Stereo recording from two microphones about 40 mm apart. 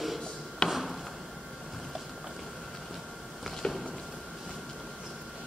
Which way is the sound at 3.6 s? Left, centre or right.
Left.